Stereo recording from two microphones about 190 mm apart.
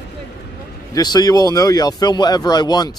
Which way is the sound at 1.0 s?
20° left (ahead or behind).